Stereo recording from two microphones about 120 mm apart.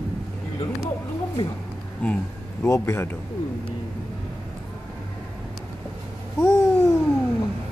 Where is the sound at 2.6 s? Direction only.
25° left (ahead or behind).